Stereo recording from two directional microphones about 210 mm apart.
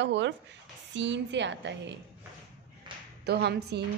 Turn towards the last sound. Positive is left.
turn(degrees=-50)  # may be behind; listen again after turning